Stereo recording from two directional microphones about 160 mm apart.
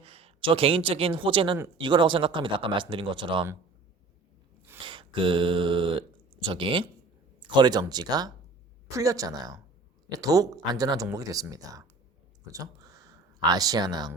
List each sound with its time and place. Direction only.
0.0 s speech: 35° right (ahead or behind)
4.8 s speech: 30° right (ahead or behind)
12.5 s a sound: 20° right (ahead or behind)